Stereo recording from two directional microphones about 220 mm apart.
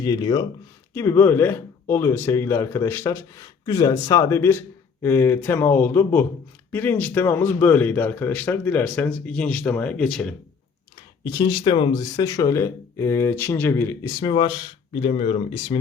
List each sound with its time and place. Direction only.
0.0 s speech: 15° left (ahead or behind)
11.2 s speech: 20° left (ahead or behind)